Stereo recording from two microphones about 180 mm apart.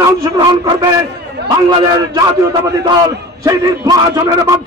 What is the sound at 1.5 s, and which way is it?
A man's voice, 20° right (ahead or behind).